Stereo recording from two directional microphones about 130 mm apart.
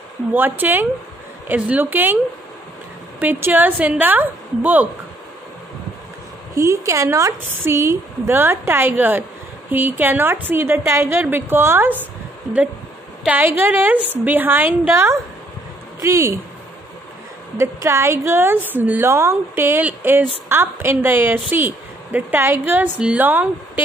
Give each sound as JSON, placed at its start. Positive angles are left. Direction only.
{"t": 0.3, "sound": "a woman's voice", "side_deg": -15}
{"t": 3.2, "sound": "a woman's voice", "side_deg": -15}
{"t": 6.5, "sound": "a woman's voice", "side_deg": -25}
{"t": 13.2, "sound": "a woman's voice", "side_deg": -15}
{"t": 17.6, "sound": "a woman's voice", "side_deg": -20}